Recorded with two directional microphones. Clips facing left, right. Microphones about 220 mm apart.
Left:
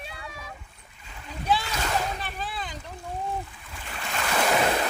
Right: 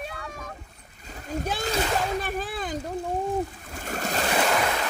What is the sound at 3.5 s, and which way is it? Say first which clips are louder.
Splash: right 7 dB; 45° right (ahead or behind).